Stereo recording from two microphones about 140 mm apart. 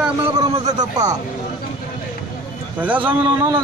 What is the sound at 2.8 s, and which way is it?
Speech, 10° right (ahead or behind).